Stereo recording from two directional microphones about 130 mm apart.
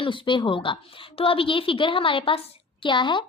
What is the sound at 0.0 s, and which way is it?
A woman's voice, 40° left (ahead or behind).